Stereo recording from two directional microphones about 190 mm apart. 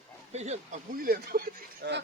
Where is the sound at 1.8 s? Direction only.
70° right (ahead or behind).